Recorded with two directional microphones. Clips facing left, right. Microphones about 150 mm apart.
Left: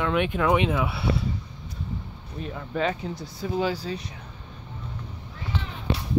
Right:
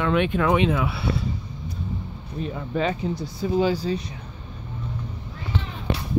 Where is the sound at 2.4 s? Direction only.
5° right (ahead or behind).